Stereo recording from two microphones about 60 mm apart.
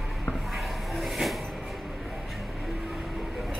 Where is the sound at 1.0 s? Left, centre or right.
Centre.